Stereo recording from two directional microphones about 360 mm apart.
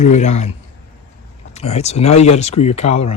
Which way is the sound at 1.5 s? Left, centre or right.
Centre.